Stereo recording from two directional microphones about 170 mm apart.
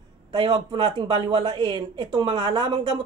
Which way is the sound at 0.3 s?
30° right (ahead or behind).